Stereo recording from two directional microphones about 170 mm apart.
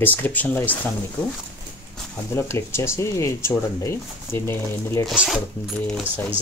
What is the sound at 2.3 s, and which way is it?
Speech, 15° left (ahead or behind).